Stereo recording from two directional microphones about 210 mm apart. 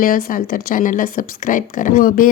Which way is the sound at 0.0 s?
45° left (ahead or behind).